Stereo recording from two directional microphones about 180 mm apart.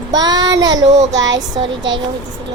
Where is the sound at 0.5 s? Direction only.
90° right.